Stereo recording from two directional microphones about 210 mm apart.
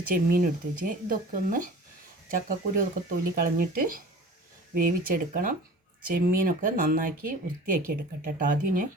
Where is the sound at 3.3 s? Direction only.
45° right (ahead or behind).